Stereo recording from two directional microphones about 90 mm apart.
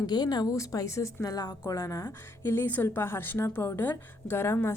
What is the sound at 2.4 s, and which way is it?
A woman's voice, 25° left (ahead or behind).